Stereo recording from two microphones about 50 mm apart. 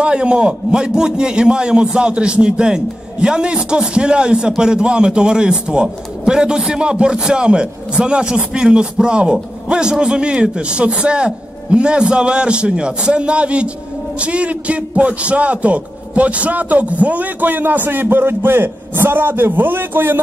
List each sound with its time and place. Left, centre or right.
0.0 s a man's voice: centre; by 20.2 s right